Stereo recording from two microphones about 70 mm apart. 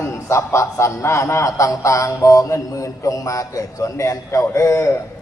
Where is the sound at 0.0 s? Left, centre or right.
Left.